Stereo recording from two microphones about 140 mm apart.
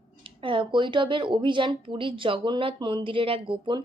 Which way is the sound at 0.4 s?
35° right (ahead or behind).